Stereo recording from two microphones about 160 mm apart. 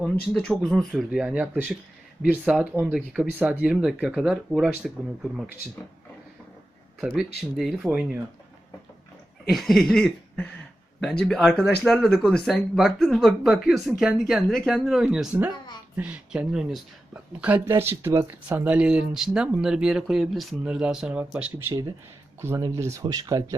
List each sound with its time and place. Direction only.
0.0 s speech: 5° left (ahead or behind)
7.0 s speech: 5° right (ahead or behind)
9.5 s speech: centre (ahead or behind)
17.7 s speech: 15° right (ahead or behind)